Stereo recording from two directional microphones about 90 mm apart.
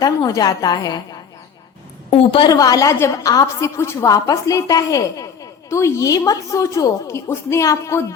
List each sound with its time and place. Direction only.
0.0 s a woman's voice: 45° left (ahead or behind)
2.0 s a woman's voice: 80° left
2.5 s a woman's voice: 40° left (ahead or behind)
4.1 s a woman's voice: 40° left (ahead or behind)